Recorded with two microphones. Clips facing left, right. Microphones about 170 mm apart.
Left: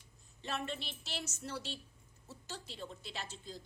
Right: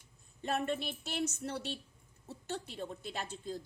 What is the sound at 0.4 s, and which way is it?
A woman's voice, 50° right (ahead or behind).